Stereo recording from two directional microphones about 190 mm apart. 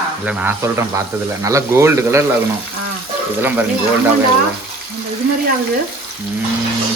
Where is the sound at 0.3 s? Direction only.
10° right (ahead or behind).